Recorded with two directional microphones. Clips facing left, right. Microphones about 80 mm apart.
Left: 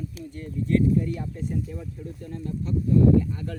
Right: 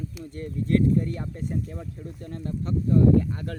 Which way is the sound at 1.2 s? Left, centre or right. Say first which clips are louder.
Even; right.